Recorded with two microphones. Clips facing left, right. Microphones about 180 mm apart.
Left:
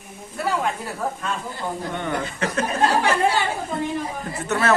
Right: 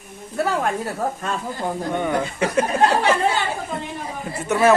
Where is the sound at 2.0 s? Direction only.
10° right (ahead or behind).